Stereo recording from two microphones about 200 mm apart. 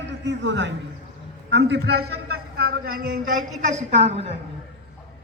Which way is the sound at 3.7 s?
35° right (ahead or behind).